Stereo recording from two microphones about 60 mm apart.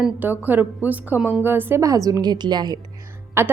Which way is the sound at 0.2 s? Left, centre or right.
Right.